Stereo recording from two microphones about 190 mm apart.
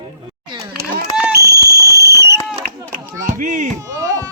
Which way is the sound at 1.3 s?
60° right (ahead or behind).